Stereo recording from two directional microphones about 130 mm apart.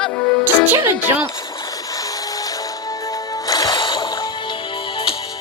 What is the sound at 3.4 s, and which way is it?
Music, 30° left (ahead or behind).